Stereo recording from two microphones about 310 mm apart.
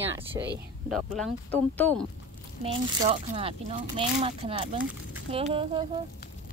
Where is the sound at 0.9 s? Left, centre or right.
Centre.